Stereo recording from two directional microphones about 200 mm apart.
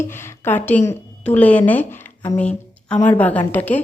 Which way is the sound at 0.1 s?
10° left (ahead or behind).